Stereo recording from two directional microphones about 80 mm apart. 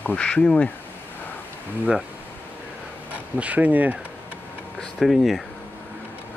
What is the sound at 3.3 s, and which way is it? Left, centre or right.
Speech, centre.